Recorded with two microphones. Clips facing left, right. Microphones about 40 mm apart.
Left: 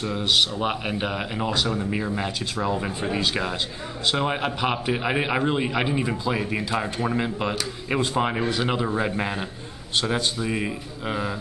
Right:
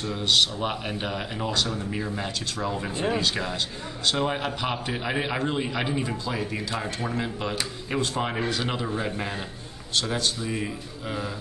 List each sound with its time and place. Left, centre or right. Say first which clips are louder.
0.0 s a man's voice: left 1 dB; centre